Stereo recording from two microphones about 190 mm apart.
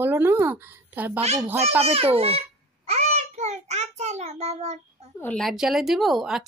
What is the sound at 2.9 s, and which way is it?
Child singing, 35° right (ahead or behind).